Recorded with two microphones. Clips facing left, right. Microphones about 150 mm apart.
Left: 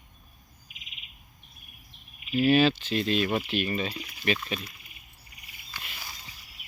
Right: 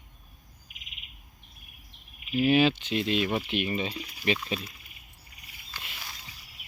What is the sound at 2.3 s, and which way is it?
Speech, 15° right (ahead or behind).